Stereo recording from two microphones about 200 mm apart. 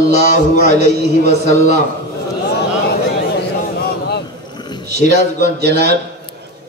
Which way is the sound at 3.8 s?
55° left (ahead or behind).